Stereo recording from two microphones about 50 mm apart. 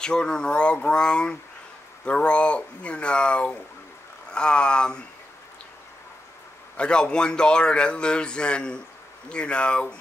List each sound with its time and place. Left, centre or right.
0.0 s a man's voice: centre
6.8 s a man's voice: centre